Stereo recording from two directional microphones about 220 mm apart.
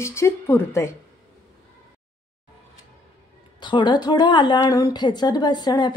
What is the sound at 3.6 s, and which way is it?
A woman's voice, 20° left (ahead or behind).